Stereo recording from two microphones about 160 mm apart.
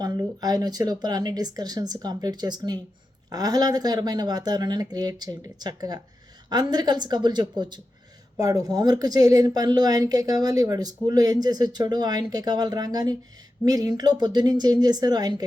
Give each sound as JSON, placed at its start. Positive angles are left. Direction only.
{"t": 0.0, "sound": "a woman's voice", "side_deg": -25}